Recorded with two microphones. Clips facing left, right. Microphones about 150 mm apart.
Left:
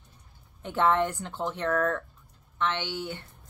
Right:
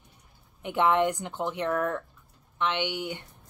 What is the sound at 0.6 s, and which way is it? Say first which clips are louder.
A woman's voice: right 1 dB; 15° right (ahead or behind).